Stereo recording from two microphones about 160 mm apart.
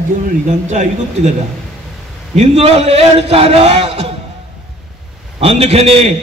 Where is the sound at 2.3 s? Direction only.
40° right (ahead or behind).